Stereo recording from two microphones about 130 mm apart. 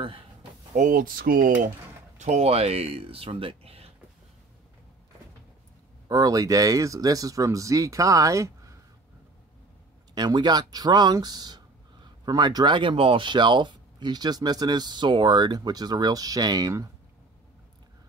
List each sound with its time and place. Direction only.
0.0 s a sound: 40° right (ahead or behind)
0.7 s speech: 90° right
2.1 s speech: 60° right (ahead or behind)
6.0 s speech: 25° right (ahead or behind)
10.1 s speech: 35° right (ahead or behind)